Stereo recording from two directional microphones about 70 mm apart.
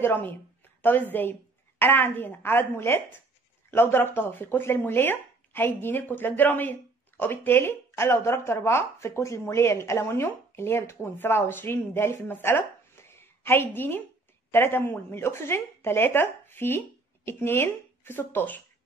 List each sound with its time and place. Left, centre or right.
0.0 s a woman's voice: left